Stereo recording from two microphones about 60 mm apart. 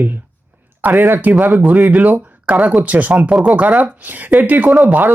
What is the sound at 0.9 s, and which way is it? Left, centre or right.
Speech, right.